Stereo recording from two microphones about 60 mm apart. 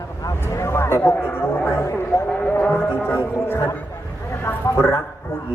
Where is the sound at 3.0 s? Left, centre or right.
Left.